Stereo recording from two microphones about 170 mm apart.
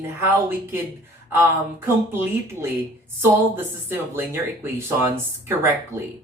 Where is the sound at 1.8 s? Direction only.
15° right (ahead or behind).